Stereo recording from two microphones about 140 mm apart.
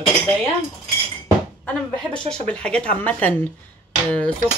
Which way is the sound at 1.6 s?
5° left (ahead or behind).